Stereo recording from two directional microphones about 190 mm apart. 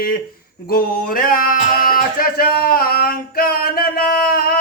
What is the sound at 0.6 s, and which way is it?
Music, 50° left (ahead or behind).